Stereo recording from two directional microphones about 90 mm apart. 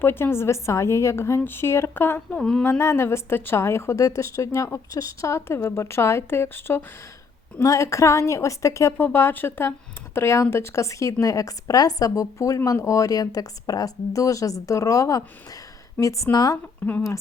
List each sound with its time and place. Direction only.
0.0 s a woman's voice: 25° left (ahead or behind)
2.4 s speech: 10° left (ahead or behind)
2.6 s a woman's voice: 30° left (ahead or behind)
7.6 s a woman's voice: 35° left (ahead or behind)
9.0 s a woman's voice: 25° left (ahead or behind); by 16.6 s 45° left (ahead or behind)
16.8 s speech: 20° left (ahead or behind)